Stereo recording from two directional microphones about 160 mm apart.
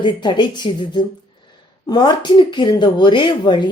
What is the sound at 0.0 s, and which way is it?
A woman's voice, 30° left (ahead or behind).